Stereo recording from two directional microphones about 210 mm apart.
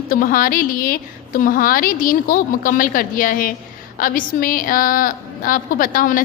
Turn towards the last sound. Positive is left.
turn(degrees=40)  # may be behind; listen again after turning